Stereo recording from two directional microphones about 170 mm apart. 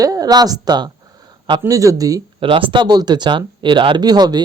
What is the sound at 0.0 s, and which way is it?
Speech, 20° right (ahead or behind).